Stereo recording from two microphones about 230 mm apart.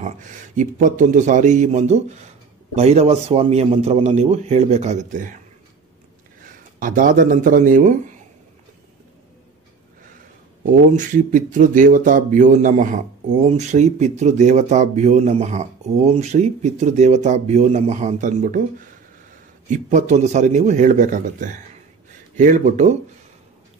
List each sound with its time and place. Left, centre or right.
0.6 s a man's voice: right
6.8 s speech: right
10.6 s speech: right
19.7 s speech: right